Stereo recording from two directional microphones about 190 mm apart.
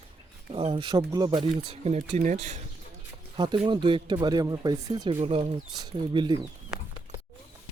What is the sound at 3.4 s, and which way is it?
Speech, 25° right (ahead or behind).